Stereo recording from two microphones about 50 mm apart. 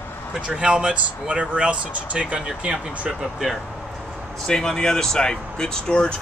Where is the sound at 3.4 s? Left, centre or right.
Centre.